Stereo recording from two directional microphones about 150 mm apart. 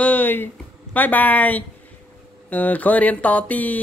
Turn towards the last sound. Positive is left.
turn(degrees=10)  # may be behind; listen again after turning